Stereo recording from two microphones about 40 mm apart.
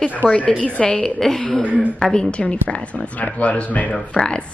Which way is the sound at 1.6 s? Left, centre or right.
Right.